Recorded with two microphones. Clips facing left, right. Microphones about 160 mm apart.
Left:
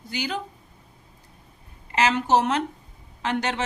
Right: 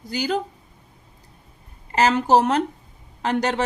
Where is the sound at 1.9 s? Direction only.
40° right (ahead or behind).